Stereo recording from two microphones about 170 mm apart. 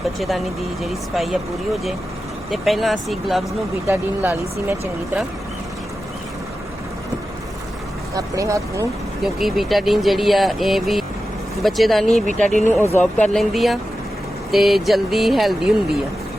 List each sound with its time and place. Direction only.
0.2 s speech: centre (ahead or behind)
3.8 s speech: 15° right (ahead or behind)
8.1 s speech: 20° right (ahead or behind)
9.2 s speech: centre (ahead or behind)